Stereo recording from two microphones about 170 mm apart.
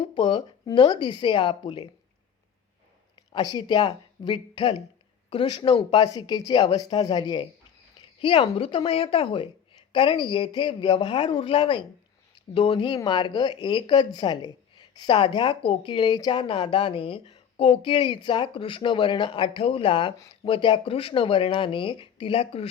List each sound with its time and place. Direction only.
0.0 s speech: 30° left (ahead or behind)
3.3 s speech: 25° left (ahead or behind)